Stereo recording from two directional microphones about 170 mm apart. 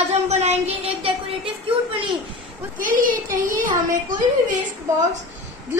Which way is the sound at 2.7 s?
55° right (ahead or behind).